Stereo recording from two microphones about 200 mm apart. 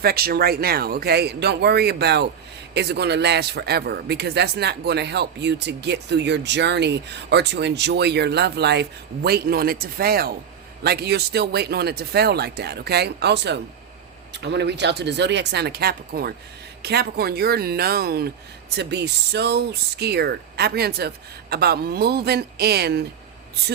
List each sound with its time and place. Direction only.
0.0 s a man's voice: 50° right (ahead or behind)